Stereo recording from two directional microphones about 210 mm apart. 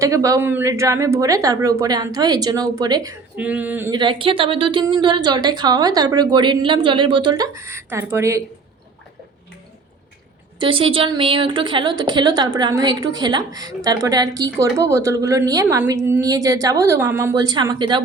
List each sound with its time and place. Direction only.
0.0 s a woman's voice: 15° right (ahead or behind)
3.3 s a woman's voice: 5° right (ahead or behind)
3.9 s speech: 25° right (ahead or behind)
10.6 s a woman's voice: 25° right (ahead or behind)